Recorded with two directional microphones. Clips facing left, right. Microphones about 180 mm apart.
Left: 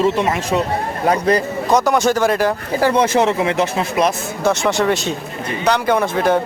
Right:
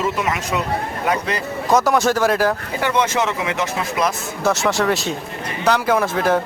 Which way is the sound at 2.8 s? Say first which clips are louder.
Left 6 dB; 35° left (ahead or behind).